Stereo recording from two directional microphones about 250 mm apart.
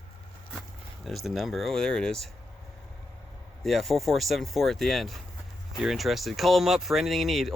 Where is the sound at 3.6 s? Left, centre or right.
Centre.